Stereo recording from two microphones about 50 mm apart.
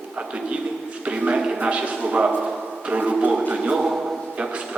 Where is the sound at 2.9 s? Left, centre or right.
Right.